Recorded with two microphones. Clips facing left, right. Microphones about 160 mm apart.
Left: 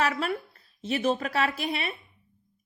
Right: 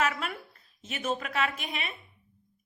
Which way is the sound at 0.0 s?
35° left (ahead or behind).